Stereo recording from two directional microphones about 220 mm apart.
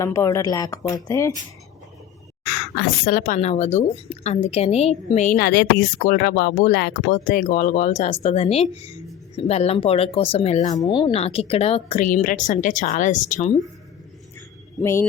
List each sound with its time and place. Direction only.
0.0 s speech: 15° left (ahead or behind)
2.4 s speech: 45° left (ahead or behind)
10.8 s speech: 20° left (ahead or behind)
14.8 s speech: 10° left (ahead or behind)